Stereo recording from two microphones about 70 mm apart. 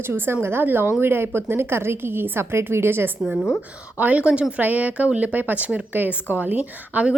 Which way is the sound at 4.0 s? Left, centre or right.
Right.